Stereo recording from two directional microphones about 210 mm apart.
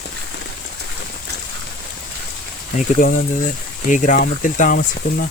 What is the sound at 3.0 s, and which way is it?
Speech, 40° left (ahead or behind).